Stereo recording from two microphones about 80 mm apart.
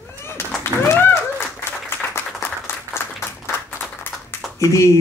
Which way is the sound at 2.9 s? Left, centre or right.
Left.